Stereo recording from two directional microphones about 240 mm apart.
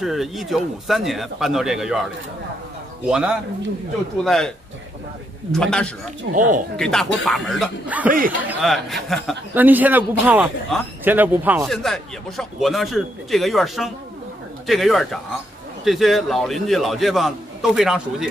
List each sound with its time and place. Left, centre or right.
0.0 s a man's voice: centre
3.1 s a man's voice: centre
5.5 s a man's voice: centre
6.3 s speech: right
6.8 s a man's voice: centre